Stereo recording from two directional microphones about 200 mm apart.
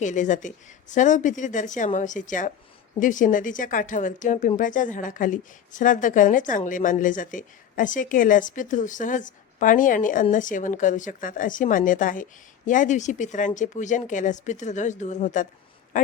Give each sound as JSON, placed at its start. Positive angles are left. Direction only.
{"t": 0.0, "sound": "speech", "side_deg": 40}